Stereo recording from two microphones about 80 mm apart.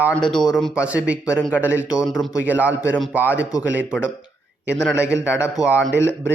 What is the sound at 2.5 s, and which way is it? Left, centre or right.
Speech, right.